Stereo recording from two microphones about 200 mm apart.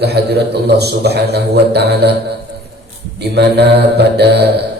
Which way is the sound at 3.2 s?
55° right (ahead or behind).